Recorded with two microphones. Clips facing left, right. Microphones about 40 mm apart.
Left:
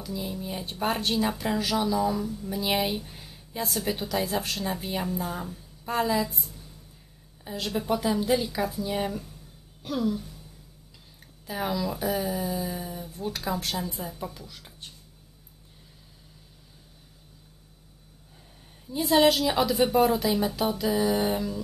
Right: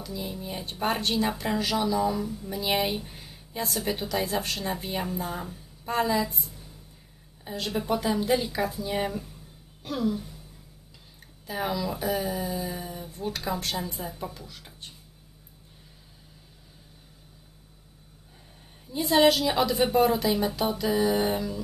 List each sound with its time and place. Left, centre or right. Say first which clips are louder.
0.0 s a woman's voice: left 1 dB; centre
9.8 s a sound: even; centre
11.4 s a woman's voice: even; centre
18.9 s a woman's voice: even; centre